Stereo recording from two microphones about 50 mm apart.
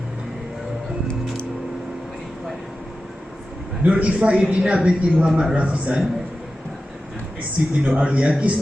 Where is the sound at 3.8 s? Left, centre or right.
Right.